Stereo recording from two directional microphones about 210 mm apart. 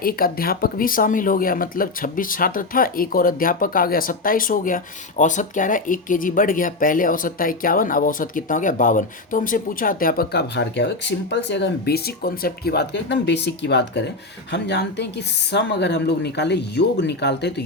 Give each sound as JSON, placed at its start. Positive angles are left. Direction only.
{"t": 0.0, "sound": "speech", "side_deg": 45}